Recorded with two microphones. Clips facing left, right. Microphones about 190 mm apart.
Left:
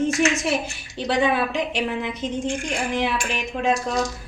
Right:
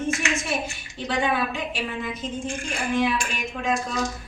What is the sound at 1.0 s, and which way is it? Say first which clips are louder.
A woman's voice: left 4 dB; 70° left (ahead or behind).